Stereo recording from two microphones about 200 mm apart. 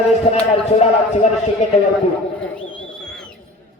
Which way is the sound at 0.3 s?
30° left (ahead or behind).